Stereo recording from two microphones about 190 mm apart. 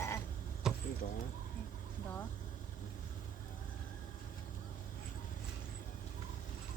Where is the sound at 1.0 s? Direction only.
45° left (ahead or behind).